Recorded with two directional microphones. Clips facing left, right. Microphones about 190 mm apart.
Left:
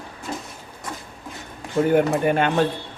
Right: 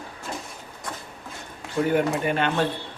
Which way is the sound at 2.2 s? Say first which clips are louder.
Left 4 dB; 50° left (ahead or behind).